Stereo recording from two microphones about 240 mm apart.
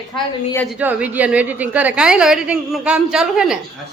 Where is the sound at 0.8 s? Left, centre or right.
Centre.